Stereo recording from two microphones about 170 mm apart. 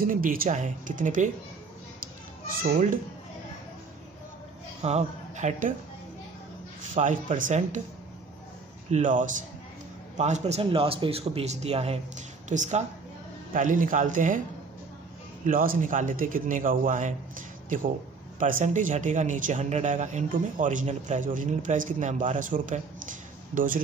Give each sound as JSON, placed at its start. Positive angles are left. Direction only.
{"t": 0.0, "sound": "speech", "side_deg": -55}
{"t": 2.6, "sound": "speech", "side_deg": -50}
{"t": 4.8, "sound": "speech", "side_deg": -40}
{"t": 6.9, "sound": "speech", "side_deg": -45}
{"t": 8.9, "sound": "a man's voice", "side_deg": -50}
{"t": 15.4, "sound": "speech", "side_deg": -55}